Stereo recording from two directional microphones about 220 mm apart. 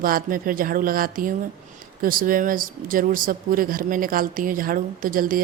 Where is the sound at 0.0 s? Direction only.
40° right (ahead or behind).